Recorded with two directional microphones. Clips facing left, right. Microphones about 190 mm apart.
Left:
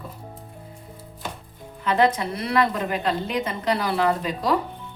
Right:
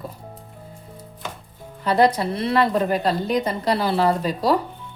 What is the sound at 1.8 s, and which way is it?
A woman's voice, 35° right (ahead or behind).